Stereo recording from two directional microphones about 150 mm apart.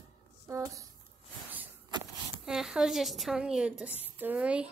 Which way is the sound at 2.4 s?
5° right (ahead or behind).